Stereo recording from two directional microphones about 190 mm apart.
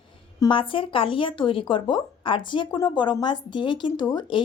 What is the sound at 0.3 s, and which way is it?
Speech, 25° left (ahead or behind).